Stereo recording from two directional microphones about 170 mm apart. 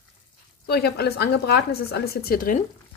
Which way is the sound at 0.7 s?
70° left (ahead or behind).